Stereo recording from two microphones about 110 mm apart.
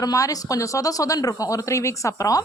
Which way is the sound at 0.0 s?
35° left (ahead or behind).